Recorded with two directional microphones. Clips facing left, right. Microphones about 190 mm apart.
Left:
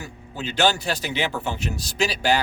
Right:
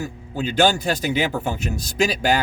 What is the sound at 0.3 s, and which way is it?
Speech, 50° right (ahead or behind).